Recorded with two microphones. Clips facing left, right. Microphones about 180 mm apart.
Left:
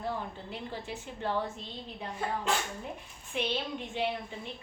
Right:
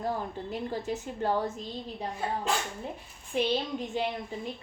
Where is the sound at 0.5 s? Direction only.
40° right (ahead or behind).